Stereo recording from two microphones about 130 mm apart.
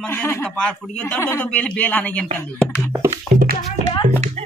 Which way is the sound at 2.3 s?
15° left (ahead or behind).